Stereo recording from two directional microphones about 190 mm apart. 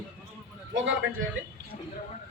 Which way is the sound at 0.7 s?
75° right (ahead or behind).